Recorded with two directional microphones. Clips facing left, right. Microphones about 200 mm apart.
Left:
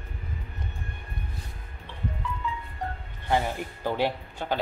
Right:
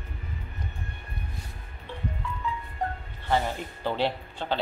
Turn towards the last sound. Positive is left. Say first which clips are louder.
# even
turn(degrees=10)  # may be behind; listen again after turning